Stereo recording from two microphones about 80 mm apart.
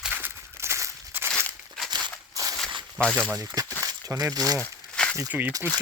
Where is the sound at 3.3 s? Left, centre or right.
Right.